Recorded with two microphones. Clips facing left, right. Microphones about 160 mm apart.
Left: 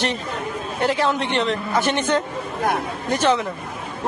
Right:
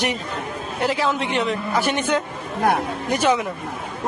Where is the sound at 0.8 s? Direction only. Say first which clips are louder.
Left 1 dB; centre (ahead or behind).